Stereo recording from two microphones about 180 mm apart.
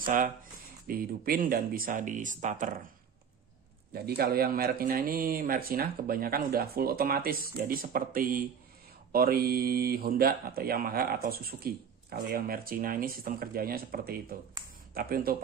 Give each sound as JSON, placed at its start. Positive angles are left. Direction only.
{"t": 0.0, "sound": "speech", "side_deg": -50}
{"t": 3.9, "sound": "speech", "side_deg": -60}